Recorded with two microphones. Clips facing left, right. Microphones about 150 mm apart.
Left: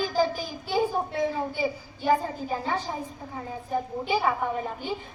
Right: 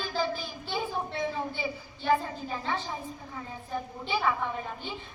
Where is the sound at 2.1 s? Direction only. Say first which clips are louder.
Left 3 dB; 40° left (ahead or behind).